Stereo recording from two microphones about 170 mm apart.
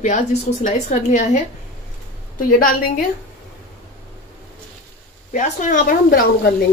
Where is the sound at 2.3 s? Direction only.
55° left (ahead or behind).